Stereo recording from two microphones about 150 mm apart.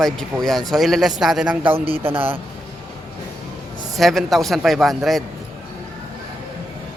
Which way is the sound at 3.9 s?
Centre (ahead or behind).